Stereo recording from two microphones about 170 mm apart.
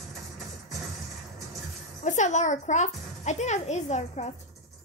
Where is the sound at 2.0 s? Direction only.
45° left (ahead or behind).